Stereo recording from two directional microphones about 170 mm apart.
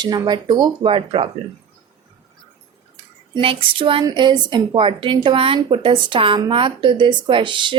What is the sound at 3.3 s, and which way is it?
A woman's voice, 30° right (ahead or behind).